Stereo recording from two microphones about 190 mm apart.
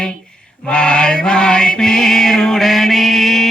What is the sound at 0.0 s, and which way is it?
Mantra, 5° left (ahead or behind).